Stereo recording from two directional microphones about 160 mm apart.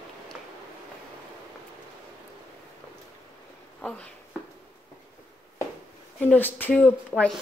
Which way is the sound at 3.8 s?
10° left (ahead or behind).